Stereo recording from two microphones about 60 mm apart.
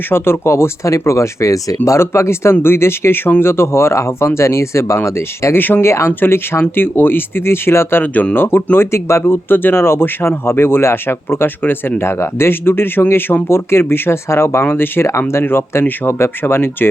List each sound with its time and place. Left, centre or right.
0.1 s speech: left
5.5 s speech: left
5.8 s speech: left
6.1 s speech: left
8.1 s speech: left
9.2 s speech: left